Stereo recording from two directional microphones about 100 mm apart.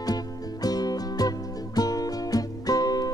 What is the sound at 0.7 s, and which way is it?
Music, 40° left (ahead or behind).